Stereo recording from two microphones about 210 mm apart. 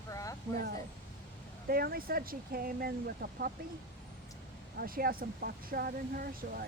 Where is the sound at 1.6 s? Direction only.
45° right (ahead or behind).